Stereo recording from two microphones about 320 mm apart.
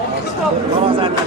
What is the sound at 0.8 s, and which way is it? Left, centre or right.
Speech, centre.